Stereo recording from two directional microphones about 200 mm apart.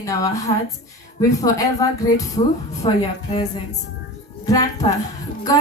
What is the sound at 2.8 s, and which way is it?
Speech, 30° left (ahead or behind).